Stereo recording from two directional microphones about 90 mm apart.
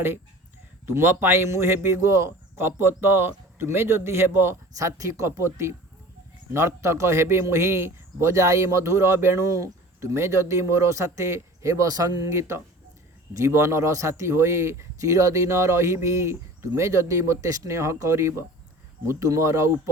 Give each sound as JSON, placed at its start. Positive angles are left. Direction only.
{"t": 0.9, "sound": "a man's voice", "side_deg": -25}